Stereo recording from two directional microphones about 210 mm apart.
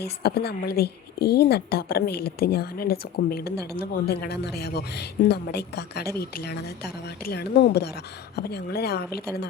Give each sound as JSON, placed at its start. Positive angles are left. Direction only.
{"t": 0.0, "sound": "a woman's voice", "side_deg": 50}